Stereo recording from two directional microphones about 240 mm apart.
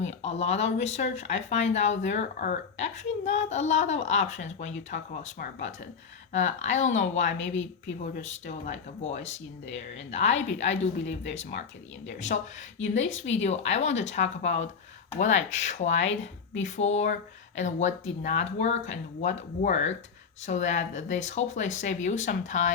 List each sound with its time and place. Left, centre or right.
0.0 s a woman's voice: left
12.3 s a woman's voice: left